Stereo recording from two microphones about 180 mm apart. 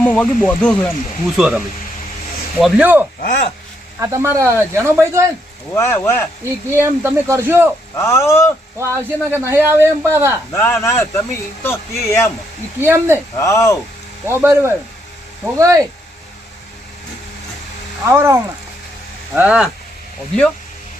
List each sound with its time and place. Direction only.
0.0 s speech: 10° left (ahead or behind)
1.4 s speech: 5° right (ahead or behind)
5.7 s speech: 15° left (ahead or behind)
6.4 s speech: 15° right (ahead or behind)
7.9 s speech: 15° left (ahead or behind)
8.8 s speech: 15° right (ahead or behind)
10.5 s speech: 15° left (ahead or behind)
12.8 s speech: 10° right (ahead or behind)
13.4 s speech: 15° left (ahead or behind)
14.3 s speech: 15° right (ahead or behind)
18.0 s speech: 15° right (ahead or behind)